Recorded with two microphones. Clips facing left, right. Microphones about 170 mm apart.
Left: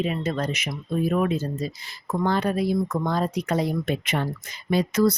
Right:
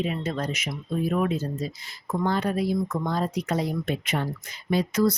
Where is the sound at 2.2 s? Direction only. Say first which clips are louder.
Left 2 dB; 75° left (ahead or behind).